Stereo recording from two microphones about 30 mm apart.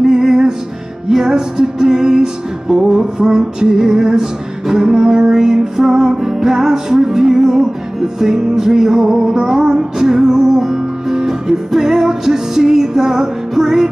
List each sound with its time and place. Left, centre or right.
0.0 s music: centre
3.2 s music: right